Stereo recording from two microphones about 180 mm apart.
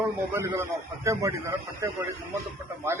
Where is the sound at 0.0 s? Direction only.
15° right (ahead or behind).